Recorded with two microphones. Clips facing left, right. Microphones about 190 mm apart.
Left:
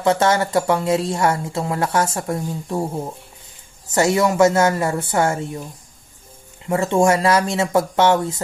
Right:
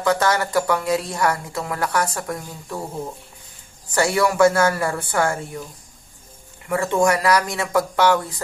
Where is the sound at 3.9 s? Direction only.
20° left (ahead or behind).